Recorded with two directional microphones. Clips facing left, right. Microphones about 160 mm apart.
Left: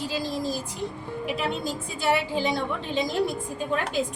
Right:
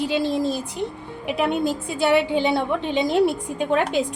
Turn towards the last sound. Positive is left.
turn(degrees=-70)  # may be behind; listen again after turning